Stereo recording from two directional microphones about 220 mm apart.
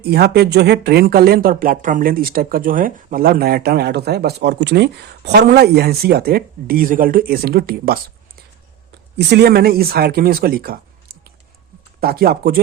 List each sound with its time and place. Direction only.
0.0 s speech: 45° right (ahead or behind)
9.1 s speech: 50° right (ahead or behind)
11.9 s speech: 45° right (ahead or behind)